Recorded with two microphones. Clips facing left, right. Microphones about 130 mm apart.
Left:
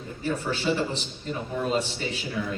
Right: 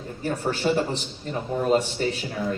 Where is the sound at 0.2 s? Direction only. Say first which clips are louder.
Right 3 dB; 45° right (ahead or behind).